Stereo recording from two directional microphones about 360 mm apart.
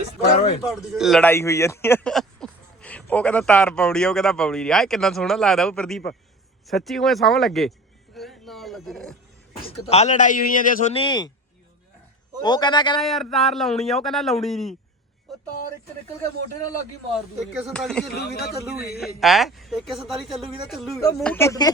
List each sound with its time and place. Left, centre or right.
0.6 s speech: centre
8.1 s music: centre
9.6 s speech: centre
12.4 s a man's voice: centre
13.0 s speech: centre
15.3 s a sound: centre
17.6 s speech: centre
18.1 s speech: left
18.9 s speech: centre